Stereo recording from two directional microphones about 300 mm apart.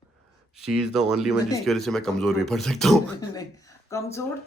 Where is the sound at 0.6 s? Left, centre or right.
Centre.